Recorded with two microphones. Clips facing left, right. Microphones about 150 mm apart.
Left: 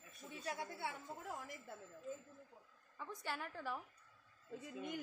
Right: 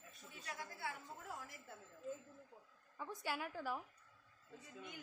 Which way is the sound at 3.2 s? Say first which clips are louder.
Right 2 dB; 5° right (ahead or behind).